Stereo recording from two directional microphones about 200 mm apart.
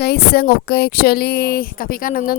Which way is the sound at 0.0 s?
55° left (ahead or behind).